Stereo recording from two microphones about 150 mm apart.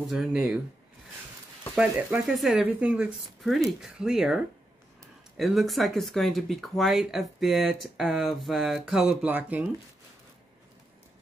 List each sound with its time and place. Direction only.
0.0 s speech: centre (ahead or behind)
1.8 s speech: 10° right (ahead or behind)
5.4 s speech: centre (ahead or behind)